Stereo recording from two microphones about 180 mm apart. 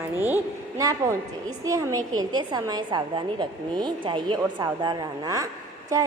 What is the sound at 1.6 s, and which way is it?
A woman's voice, 20° right (ahead or behind).